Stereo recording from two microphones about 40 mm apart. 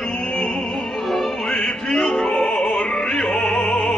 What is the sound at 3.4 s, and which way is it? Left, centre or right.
Music, left.